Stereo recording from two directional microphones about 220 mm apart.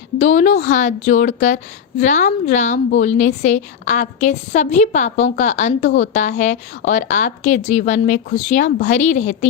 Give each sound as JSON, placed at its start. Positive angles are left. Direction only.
{"t": 0.2, "sound": "a woman's voice", "side_deg": 35}